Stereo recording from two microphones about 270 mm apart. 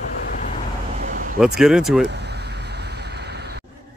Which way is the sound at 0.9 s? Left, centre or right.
Right.